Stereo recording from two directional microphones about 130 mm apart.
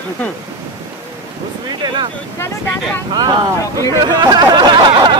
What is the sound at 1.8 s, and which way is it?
Speech, 35° right (ahead or behind).